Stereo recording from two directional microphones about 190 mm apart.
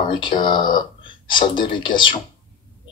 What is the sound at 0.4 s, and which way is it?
Speech, 25° left (ahead or behind).